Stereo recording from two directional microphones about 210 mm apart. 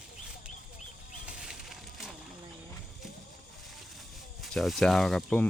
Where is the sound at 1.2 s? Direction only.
5° right (ahead or behind).